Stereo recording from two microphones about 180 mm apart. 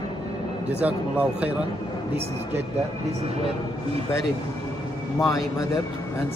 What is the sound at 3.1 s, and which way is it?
Speech, 35° right (ahead or behind).